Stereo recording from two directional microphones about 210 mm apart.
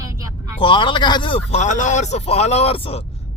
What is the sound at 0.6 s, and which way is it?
A man's voice, 20° left (ahead or behind).